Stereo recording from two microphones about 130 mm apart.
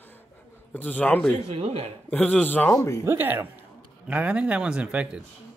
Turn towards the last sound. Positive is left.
turn(degrees=-10)  # may be behind; listen again after turning